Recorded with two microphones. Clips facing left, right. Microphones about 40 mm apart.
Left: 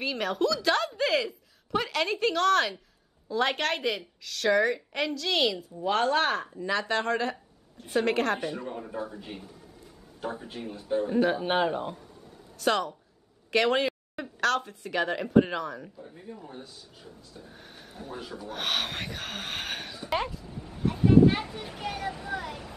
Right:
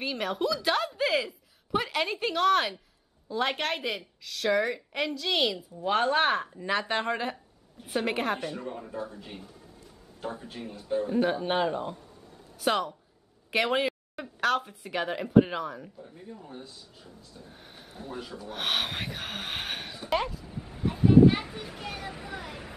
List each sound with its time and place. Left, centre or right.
0.0 s a woman's voice: centre
5.9 s a woman's voice: centre
8.4 s a man's voice: centre
10.2 s a man's voice: centre
12.5 s speech: centre
13.5 s a sound: centre
14.5 s a woman's voice: centre
16.0 s a man's voice: centre
17.5 s a woman's voice: centre
20.4 s vehicle: centre
21.6 s a woman's voice: centre
22.1 s a woman's voice: centre